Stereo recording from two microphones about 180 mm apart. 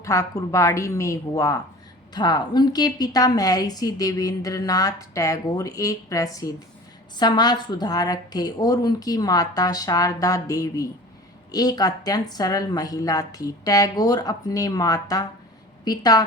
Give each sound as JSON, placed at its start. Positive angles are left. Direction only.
{"t": 0.0, "sound": "a woman's voice", "side_deg": 15}